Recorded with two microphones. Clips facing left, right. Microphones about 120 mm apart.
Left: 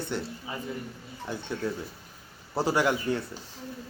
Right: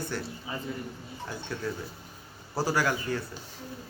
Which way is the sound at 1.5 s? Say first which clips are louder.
Left 2 dB; 25° left (ahead or behind).